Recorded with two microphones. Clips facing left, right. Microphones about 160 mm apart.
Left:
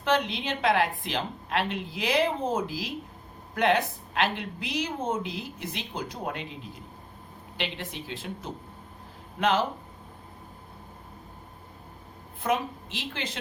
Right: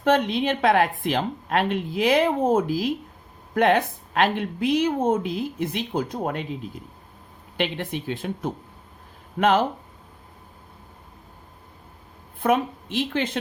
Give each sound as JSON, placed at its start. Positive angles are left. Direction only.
{"t": 0.0, "sound": "a woman's voice", "side_deg": -50}
{"t": 7.5, "sound": "a woman's voice", "side_deg": -55}
{"t": 12.4, "sound": "a woman's voice", "side_deg": -55}